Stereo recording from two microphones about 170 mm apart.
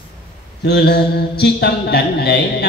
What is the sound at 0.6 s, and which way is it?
Mantra, 80° left.